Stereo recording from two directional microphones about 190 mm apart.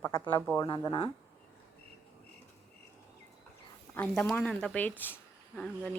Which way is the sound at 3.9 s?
10° left (ahead or behind).